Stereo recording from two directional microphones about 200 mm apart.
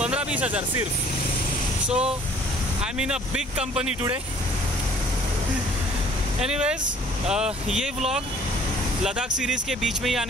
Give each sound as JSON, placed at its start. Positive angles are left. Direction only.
{"t": 0.0, "sound": "a sound", "side_deg": -5}
{"t": 1.9, "sound": "speech", "side_deg": -5}
{"t": 6.4, "sound": "speech", "side_deg": -5}
{"t": 9.4, "sound": "speech", "side_deg": -5}